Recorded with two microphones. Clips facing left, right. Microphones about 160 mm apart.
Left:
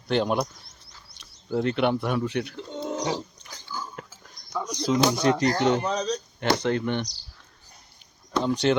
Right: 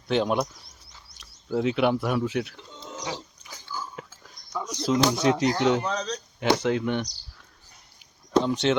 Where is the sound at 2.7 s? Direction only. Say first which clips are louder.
Left 11 dB; 65° left (ahead or behind).